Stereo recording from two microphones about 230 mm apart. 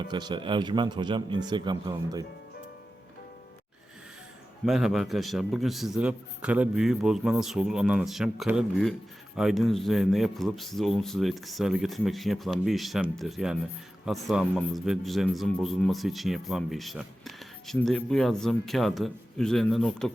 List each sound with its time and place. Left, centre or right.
0.1 s a man's voice: centre
4.6 s a man's voice: centre